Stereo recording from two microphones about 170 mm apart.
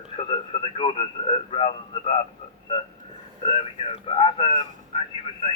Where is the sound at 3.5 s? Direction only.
35° left (ahead or behind).